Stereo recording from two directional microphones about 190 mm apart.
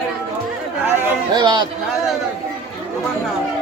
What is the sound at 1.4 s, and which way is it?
Speech, 20° right (ahead or behind).